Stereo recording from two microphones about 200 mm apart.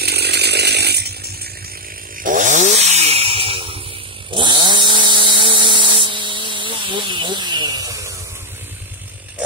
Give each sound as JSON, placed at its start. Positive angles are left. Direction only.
{"t": 0.0, "sound": "chainsaw", "side_deg": -55}
{"t": 2.2, "sound": "chainsaw", "side_deg": -40}